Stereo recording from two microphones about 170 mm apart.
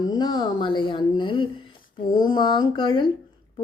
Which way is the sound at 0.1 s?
25° left (ahead or behind).